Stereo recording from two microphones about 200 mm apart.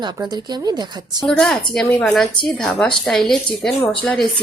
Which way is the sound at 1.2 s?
5° left (ahead or behind).